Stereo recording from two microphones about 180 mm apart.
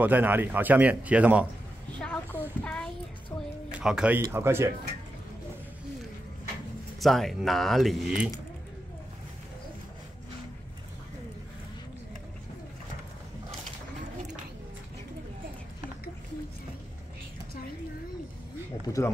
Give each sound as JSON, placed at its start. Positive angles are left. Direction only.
{"t": 0.0, "sound": "a man's voice", "side_deg": -10}
{"t": 2.0, "sound": "a child's voice", "side_deg": 5}
{"t": 3.7, "sound": "a man's voice", "side_deg": -5}
{"t": 7.0, "sound": "speech", "side_deg": 0}
{"t": 18.9, "sound": "speech", "side_deg": 15}